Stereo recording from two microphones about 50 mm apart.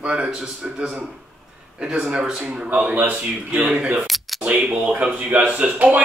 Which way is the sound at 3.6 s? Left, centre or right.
Centre.